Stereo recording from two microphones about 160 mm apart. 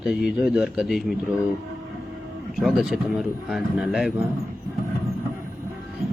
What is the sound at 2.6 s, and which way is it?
A man's voice, centre (ahead or behind).